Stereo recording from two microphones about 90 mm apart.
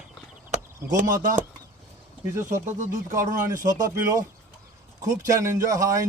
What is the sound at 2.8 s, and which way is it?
Speech, 35° right (ahead or behind).